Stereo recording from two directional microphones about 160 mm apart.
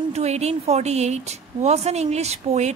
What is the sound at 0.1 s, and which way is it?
Speech, 45° right (ahead or behind).